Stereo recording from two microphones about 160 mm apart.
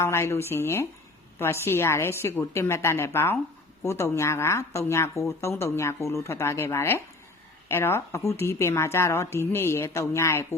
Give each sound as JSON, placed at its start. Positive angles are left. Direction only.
{"t": 0.0, "sound": "a woman's voice", "side_deg": 15}